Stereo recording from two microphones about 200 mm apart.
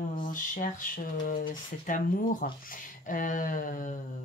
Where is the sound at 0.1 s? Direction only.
45° left (ahead or behind).